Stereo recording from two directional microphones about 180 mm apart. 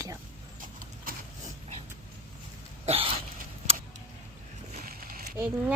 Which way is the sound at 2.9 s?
30° right (ahead or behind).